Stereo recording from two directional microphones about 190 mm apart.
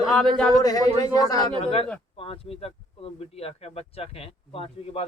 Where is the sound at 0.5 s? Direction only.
20° left (ahead or behind).